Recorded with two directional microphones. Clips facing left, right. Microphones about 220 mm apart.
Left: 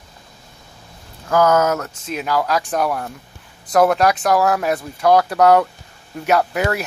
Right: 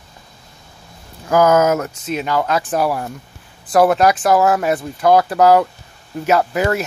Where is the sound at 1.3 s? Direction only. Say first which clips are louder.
Right 2 dB; 20° right (ahead or behind).